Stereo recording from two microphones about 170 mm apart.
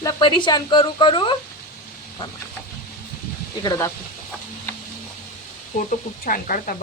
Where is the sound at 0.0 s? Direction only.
25° left (ahead or behind).